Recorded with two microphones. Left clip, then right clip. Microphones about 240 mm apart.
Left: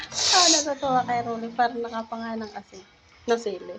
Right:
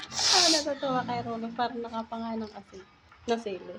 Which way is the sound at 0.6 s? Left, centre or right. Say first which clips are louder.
Left 6 dB; centre.